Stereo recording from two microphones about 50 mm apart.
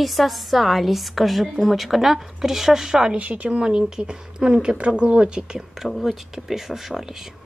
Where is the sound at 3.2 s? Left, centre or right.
Right.